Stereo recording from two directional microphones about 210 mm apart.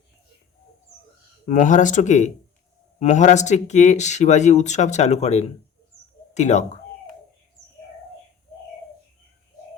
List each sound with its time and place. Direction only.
1.5 s speech: 35° left (ahead or behind)